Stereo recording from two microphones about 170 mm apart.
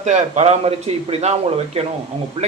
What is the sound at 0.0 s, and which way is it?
A man's voice, 45° right (ahead or behind).